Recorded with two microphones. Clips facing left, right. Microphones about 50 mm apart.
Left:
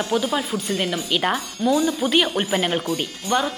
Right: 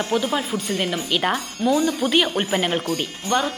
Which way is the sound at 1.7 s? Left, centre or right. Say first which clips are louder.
Even; centre.